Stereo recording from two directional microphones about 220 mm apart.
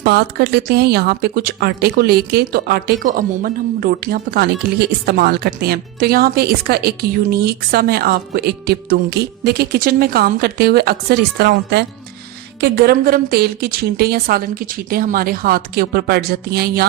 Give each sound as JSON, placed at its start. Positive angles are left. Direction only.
{"t": 0.0, "sound": "speech", "side_deg": -45}